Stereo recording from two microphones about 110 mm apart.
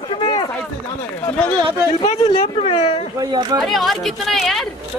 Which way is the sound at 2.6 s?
70° left (ahead or behind).